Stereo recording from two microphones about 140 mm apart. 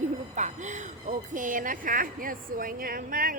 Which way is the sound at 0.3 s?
60° right (ahead or behind).